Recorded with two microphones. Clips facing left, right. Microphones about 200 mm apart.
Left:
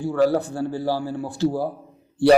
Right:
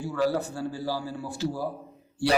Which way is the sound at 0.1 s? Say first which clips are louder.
Left 7 dB; 55° left (ahead or behind).